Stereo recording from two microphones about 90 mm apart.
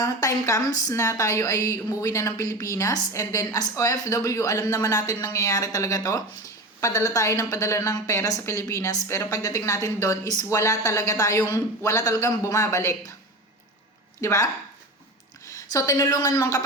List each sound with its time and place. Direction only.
0.0 s a woman's voice: 40° left (ahead or behind)
14.2 s speech: 30° left (ahead or behind)
15.5 s a woman's voice: 45° left (ahead or behind)